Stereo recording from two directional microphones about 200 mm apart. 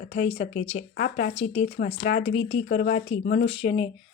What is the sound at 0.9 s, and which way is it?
Speech, 45° left (ahead or behind).